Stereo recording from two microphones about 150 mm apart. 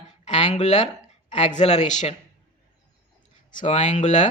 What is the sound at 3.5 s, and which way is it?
Speech, 55° left (ahead or behind).